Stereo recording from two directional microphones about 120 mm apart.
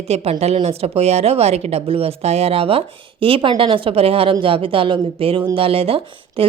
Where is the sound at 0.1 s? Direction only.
60° right (ahead or behind).